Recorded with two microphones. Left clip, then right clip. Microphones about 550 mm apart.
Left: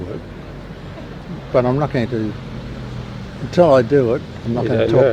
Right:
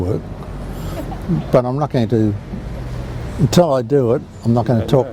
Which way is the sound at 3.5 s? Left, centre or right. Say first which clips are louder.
Left 2 dB; right.